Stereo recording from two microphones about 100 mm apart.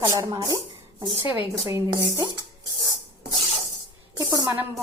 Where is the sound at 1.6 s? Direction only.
25° right (ahead or behind).